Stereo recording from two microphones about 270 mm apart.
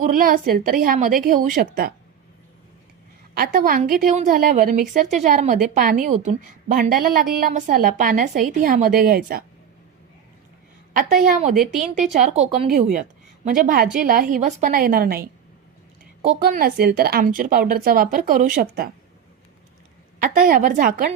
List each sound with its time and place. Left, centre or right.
0.0 s a woman's voice: right
3.3 s a woman's voice: right
10.9 s a woman's voice: right
11.7 s speech: centre
12.2 s a woman's voice: right
20.2 s a woman's voice: right